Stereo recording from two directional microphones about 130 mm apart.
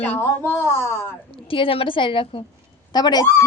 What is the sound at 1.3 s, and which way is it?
A woman's voice, 45° left (ahead or behind).